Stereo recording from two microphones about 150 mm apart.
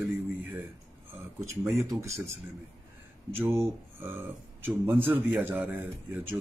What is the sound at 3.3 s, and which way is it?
A man's voice, 15° right (ahead or behind).